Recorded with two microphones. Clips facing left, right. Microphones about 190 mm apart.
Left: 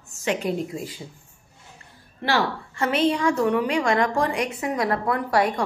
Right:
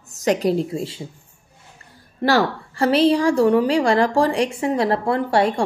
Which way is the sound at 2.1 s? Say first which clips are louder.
Right 5 dB; 40° right (ahead or behind).